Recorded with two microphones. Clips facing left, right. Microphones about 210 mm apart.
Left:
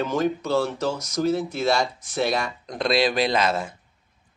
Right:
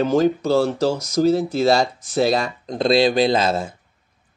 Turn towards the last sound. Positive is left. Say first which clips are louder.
# right 4 dB
turn(degrees=-30)  # may be behind; listen again after turning